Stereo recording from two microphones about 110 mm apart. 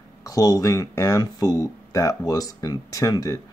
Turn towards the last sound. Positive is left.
turn(degrees=30)  # may be behind; listen again after turning